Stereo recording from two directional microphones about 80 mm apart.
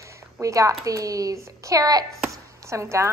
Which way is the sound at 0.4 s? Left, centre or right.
Right.